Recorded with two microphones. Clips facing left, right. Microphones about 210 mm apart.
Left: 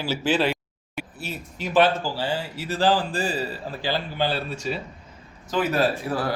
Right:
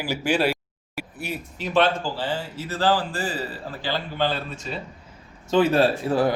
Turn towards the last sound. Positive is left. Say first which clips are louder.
# right 4 dB
turn(degrees=-25)  # may be behind; listen again after turning